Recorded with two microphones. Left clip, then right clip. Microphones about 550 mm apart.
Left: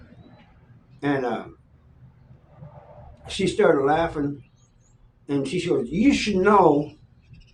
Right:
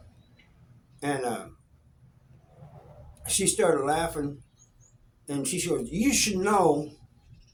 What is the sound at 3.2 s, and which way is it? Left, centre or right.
Speech, right.